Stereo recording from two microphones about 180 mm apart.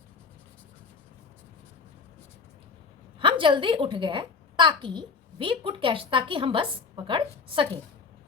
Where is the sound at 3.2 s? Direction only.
30° right (ahead or behind).